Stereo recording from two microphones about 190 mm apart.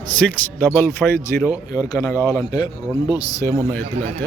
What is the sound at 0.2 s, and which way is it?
Speech, 10° left (ahead or behind).